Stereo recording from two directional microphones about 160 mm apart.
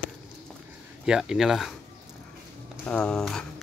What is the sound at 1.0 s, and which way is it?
Speech, 5° right (ahead or behind).